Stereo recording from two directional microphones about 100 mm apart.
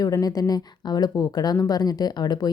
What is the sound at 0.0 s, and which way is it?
Speech, 35° left (ahead or behind).